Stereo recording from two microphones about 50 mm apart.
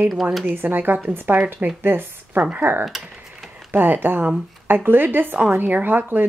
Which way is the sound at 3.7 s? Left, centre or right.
Right.